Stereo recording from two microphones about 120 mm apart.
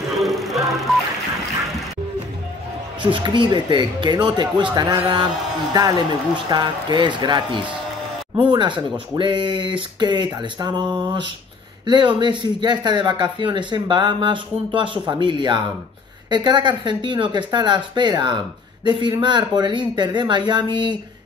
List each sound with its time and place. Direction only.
0.2 s music: centre (ahead or behind)
3.0 s speech: 40° right (ahead or behind)